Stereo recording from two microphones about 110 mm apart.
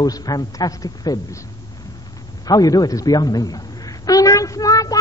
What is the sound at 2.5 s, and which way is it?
A man's voice, 35° left (ahead or behind).